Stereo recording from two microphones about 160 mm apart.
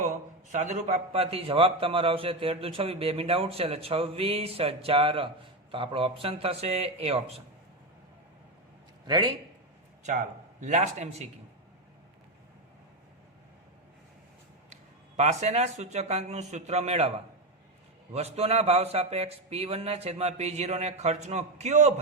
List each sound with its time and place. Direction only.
0.0 s a man's voice: 50° right (ahead or behind)
9.0 s a man's voice: 25° right (ahead or behind)
10.0 s a man's voice: 50° right (ahead or behind)
14.7 s a man's voice: 45° right (ahead or behind)